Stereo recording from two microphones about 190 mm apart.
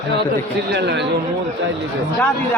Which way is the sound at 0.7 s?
60° right (ahead or behind).